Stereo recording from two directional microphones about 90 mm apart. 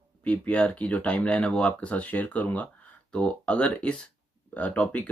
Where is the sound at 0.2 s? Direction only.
15° left (ahead or behind).